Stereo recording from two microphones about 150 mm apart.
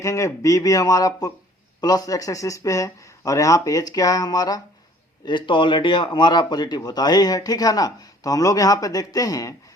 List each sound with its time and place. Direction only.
0.0 s speech: 20° left (ahead or behind)